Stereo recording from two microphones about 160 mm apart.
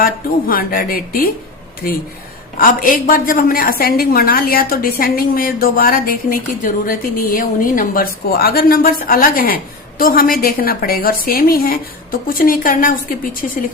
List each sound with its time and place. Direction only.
0.0 s a woman's voice: 65° left (ahead or behind)